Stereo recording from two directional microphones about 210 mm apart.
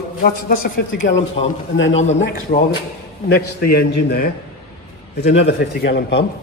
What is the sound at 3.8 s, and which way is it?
A man's voice, 50° left (ahead or behind).